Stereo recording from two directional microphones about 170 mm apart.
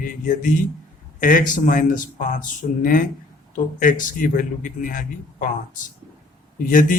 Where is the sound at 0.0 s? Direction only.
55° left (ahead or behind).